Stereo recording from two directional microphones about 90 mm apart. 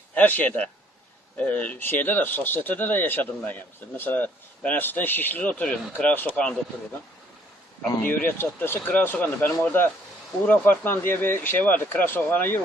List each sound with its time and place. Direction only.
0.1 s speech: 20° left (ahead or behind)
8.0 s speech: 20° left (ahead or behind)